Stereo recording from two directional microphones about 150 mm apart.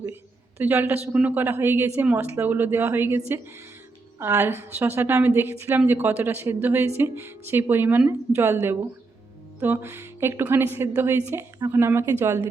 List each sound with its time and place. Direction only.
0.6 s a woman's voice: 15° right (ahead or behind)